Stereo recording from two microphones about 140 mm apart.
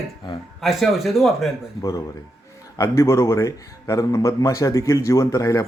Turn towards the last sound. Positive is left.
turn(degrees=25)  # may be behind; listen again after turning